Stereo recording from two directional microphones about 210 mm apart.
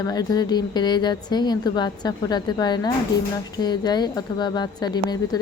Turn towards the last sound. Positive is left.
turn(degrees=20)  # may be behind; listen again after turning